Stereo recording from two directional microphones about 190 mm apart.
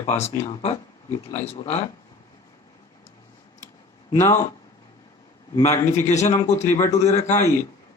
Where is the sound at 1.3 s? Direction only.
35° left (ahead or behind).